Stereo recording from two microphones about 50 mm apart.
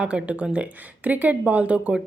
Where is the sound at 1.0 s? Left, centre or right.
Right.